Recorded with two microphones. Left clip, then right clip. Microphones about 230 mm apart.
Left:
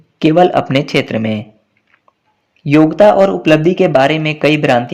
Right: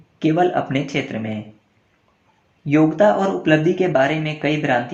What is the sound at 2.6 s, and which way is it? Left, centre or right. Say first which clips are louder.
Speech: left 7 dB; left.